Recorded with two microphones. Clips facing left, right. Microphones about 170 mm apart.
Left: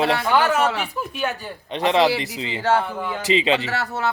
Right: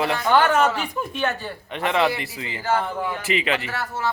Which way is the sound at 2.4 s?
25° left (ahead or behind).